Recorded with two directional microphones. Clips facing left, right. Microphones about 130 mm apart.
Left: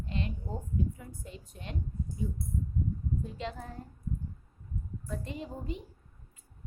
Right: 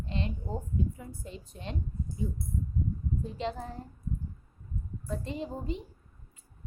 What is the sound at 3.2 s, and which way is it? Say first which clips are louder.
Speech: right 4 dB; 30° right (ahead or behind).